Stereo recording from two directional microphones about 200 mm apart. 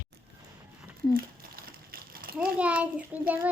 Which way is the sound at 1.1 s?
45° right (ahead or behind).